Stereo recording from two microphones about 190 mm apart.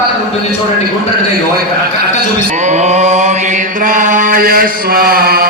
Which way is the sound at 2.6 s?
40° right (ahead or behind).